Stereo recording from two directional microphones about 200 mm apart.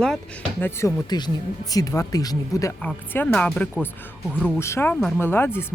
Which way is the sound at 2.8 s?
5° left (ahead or behind).